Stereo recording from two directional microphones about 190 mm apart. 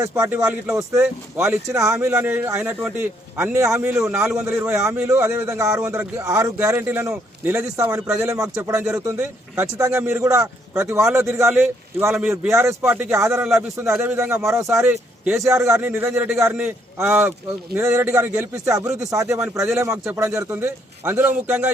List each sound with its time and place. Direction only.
0.0 s speech: 15° right (ahead or behind)
13.3 s a man's voice: 5° right (ahead or behind)